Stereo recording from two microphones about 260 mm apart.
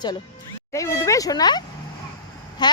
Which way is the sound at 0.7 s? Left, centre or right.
Centre.